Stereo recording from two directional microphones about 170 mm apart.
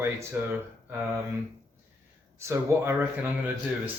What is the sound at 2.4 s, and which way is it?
Speech, 15° right (ahead or behind).